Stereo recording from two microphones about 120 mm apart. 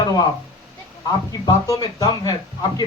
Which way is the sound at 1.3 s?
30° left (ahead or behind).